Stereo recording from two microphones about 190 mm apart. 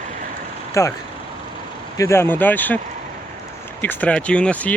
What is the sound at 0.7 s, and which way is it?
Speech, 15° left (ahead or behind).